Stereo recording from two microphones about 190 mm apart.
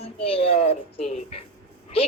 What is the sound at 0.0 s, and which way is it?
Music, 30° left (ahead or behind).